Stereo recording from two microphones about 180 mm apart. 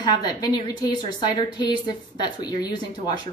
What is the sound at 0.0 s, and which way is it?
A woman's voice, 25° left (ahead or behind).